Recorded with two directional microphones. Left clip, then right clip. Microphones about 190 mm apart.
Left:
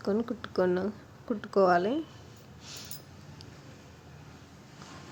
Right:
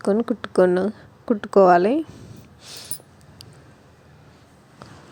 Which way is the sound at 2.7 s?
35° right (ahead or behind).